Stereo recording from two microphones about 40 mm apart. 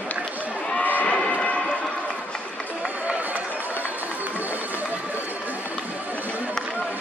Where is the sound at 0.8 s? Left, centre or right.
Left.